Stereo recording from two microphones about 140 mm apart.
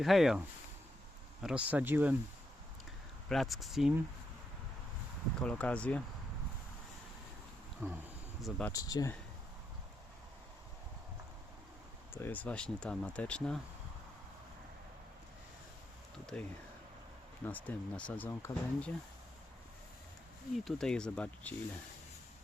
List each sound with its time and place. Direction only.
0.0 s speech: centre (ahead or behind)
3.2 s speech: centre (ahead or behind)
5.4 s speech: 10° left (ahead or behind)
7.8 s a sound: 10° right (ahead or behind)
8.7 s speech: 25° left (ahead or behind)
12.1 s speech: 15° left (ahead or behind)
16.2 s speech: 10° left (ahead or behind)
20.7 s speech: 5° left (ahead or behind)